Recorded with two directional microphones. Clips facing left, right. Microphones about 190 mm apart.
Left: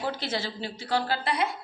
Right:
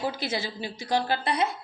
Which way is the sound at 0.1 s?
10° right (ahead or behind).